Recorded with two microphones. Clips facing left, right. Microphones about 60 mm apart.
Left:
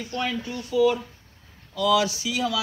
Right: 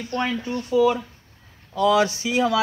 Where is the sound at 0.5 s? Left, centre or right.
Right.